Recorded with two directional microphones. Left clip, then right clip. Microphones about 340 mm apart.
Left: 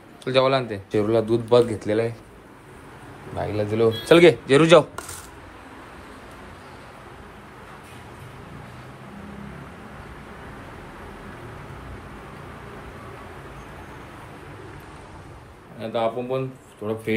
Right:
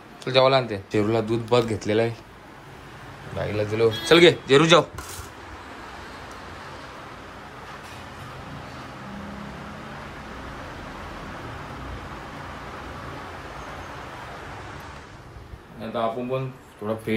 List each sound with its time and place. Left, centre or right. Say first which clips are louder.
0.2 s speech: right 1 dB; centre
3.3 s speech: left 1 dB; centre
15.9 s speech: left 2 dB; centre